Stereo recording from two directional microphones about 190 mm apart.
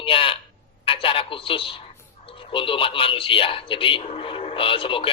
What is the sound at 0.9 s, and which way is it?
A woman's voice, 30° left (ahead or behind).